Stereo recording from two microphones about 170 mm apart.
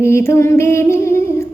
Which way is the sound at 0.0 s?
15° left (ahead or behind).